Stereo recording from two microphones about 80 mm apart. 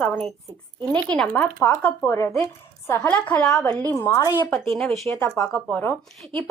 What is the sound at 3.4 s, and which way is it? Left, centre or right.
Speech, left.